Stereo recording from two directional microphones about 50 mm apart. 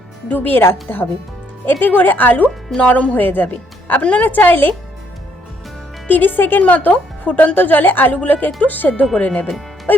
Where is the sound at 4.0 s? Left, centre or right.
Left.